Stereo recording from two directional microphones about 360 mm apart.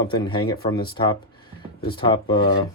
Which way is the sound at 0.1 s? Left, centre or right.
Centre.